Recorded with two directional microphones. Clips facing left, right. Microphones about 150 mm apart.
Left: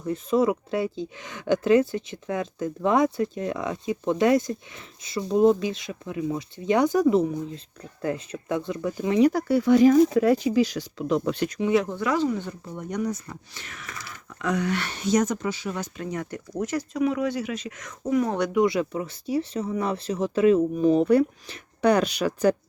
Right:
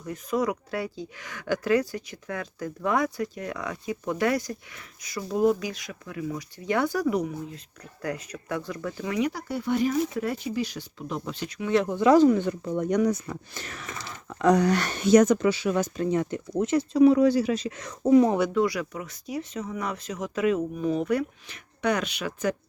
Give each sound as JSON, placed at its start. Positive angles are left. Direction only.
{"t": 0.0, "sound": "speech", "side_deg": 25}
{"t": 9.5, "sound": "speech", "side_deg": 90}
{"t": 11.7, "sound": "speech", "side_deg": 0}
{"t": 12.1, "sound": "speech", "side_deg": -50}
{"t": 13.5, "sound": "speech", "side_deg": -40}
{"t": 13.8, "sound": "speech", "side_deg": -25}
{"t": 16.0, "sound": "speech", "side_deg": -25}
{"t": 18.3, "sound": "speech", "side_deg": -5}
{"t": 18.5, "sound": "speech", "side_deg": 25}